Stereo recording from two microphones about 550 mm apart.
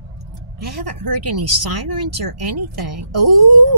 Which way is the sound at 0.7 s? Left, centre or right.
Right.